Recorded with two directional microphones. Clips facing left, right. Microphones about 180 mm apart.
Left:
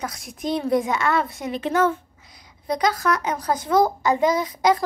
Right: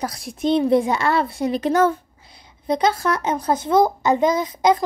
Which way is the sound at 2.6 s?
25° right (ahead or behind).